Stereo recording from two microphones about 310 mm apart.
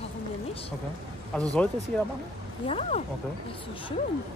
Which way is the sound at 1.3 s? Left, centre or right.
Centre.